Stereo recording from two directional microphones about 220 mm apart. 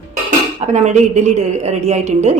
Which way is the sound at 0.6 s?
30° right (ahead or behind).